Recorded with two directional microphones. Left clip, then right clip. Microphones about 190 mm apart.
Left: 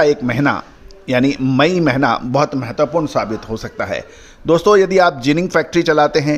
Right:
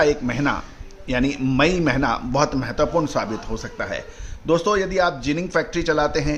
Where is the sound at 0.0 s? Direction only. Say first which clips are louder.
Left 5 dB; 35° left (ahead or behind).